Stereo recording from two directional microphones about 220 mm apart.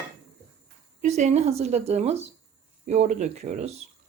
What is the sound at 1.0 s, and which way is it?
A woman's voice, 30° right (ahead or behind).